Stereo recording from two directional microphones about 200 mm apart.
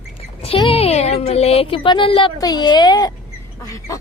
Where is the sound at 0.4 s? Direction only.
30° left (ahead or behind).